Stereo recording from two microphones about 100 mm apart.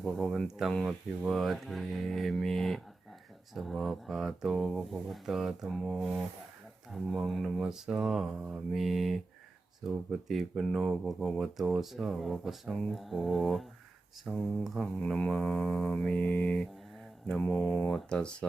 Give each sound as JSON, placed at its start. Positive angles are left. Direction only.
{"t": 0.0, "sound": "speech", "side_deg": 0}
{"t": 10.2, "sound": "speech", "side_deg": 0}
{"t": 14.3, "sound": "mantra", "side_deg": 0}
{"t": 17.8, "sound": "mantra", "side_deg": 5}